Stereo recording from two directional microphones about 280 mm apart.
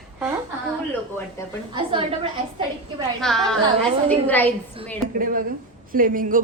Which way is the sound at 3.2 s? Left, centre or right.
Centre.